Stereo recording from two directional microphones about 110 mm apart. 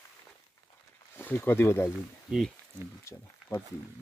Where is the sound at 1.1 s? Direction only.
20° left (ahead or behind).